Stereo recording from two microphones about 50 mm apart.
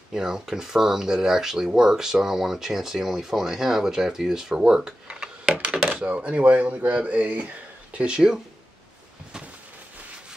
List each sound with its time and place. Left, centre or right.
0.1 s speech: centre
5.8 s a sound: centre
6.0 s a man's voice: right